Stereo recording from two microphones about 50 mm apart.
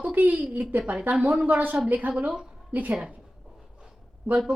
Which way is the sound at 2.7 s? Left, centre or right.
Right.